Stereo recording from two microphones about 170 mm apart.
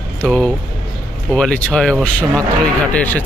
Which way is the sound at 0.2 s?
5° left (ahead or behind).